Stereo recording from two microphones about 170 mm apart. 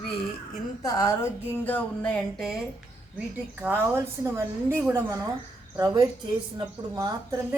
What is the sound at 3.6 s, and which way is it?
A woman's voice, 10° right (ahead or behind).